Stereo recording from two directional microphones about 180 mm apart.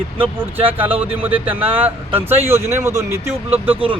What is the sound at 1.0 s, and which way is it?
Speech, 10° right (ahead or behind).